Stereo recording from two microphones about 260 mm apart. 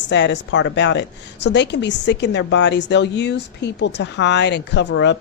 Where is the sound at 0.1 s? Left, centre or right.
Left.